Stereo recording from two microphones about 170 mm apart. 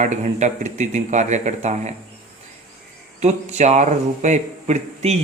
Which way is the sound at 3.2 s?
40° right (ahead or behind).